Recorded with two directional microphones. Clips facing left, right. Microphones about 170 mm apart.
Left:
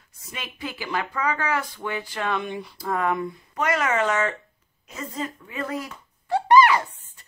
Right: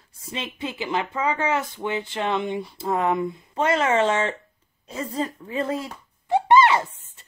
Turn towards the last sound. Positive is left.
turn(degrees=-25)  # may be behind; listen again after turning